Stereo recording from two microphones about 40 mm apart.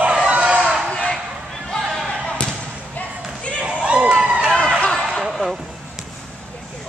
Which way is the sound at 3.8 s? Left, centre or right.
Right.